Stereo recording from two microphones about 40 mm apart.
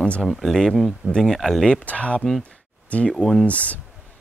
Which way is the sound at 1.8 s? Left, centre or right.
Left.